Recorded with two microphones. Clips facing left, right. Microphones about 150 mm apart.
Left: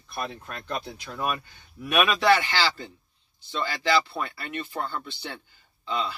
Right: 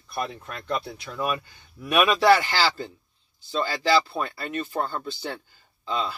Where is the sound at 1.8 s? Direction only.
35° right (ahead or behind).